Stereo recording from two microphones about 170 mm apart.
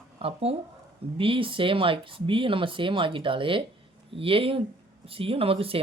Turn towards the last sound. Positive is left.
turn(degrees=-35)  # may be behind; listen again after turning